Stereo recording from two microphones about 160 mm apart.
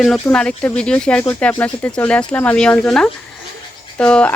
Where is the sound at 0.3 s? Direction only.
10° left (ahead or behind).